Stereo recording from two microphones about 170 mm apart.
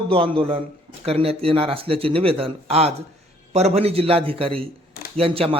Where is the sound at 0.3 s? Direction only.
30° right (ahead or behind).